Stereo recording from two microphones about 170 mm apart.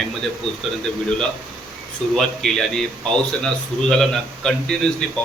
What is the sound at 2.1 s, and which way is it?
A man's voice, centre (ahead or behind).